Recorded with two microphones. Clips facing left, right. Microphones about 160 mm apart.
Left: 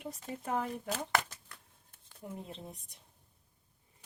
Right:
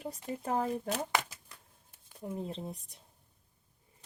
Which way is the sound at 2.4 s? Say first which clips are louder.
Right 6 dB; 35° right (ahead or behind).